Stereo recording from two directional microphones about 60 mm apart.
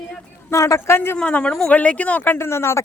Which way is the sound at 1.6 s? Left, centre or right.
Left.